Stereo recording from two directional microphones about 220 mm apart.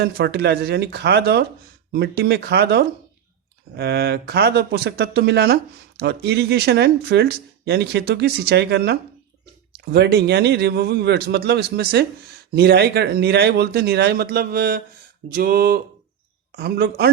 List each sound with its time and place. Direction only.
0.0 s speech: 50° right (ahead or behind)